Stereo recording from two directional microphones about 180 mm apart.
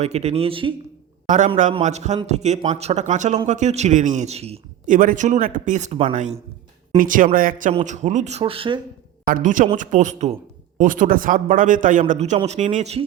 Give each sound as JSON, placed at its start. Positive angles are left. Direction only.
{"t": 0.0, "sound": "speech", "side_deg": -35}
{"t": 1.8, "sound": "speech", "side_deg": -40}
{"t": 4.9, "sound": "a man's voice", "side_deg": -45}
{"t": 7.7, "sound": "speech", "side_deg": -40}
{"t": 9.2, "sound": "a man's voice", "side_deg": -50}